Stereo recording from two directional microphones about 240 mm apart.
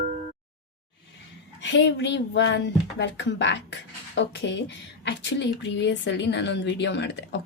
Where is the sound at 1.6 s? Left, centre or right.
Left.